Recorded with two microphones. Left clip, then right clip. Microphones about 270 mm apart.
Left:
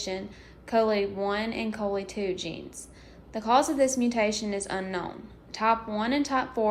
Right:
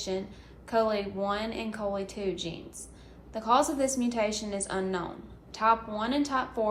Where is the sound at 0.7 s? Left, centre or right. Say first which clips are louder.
Left 3 dB; left.